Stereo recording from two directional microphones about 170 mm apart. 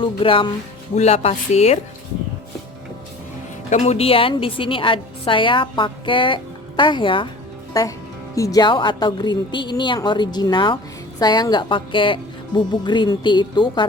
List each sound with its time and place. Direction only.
0.0 s a woman's voice: 30° left (ahead or behind)
3.7 s a woman's voice: 40° left (ahead or behind)